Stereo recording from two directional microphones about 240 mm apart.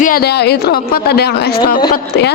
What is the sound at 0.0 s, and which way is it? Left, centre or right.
A woman's voice, left.